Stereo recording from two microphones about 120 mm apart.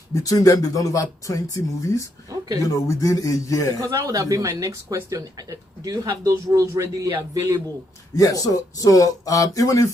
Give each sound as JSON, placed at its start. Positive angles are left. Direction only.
{"t": 0.1, "sound": "speech", "side_deg": 30}
{"t": 3.8, "sound": "speech", "side_deg": -30}
{"t": 8.1, "sound": "speech", "side_deg": 30}